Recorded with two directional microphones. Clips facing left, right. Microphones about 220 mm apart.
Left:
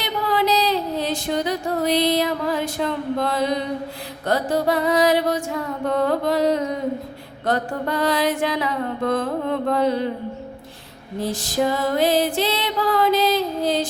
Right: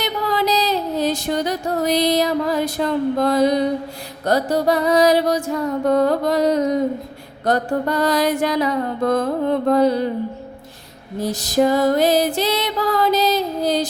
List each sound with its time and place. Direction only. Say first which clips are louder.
0.0 s a sound: right 1 dB; 40° right (ahead or behind)
4.3 s music: right 3 dB; 40° right (ahead or behind)
11.2 s music: right 4 dB; 40° right (ahead or behind)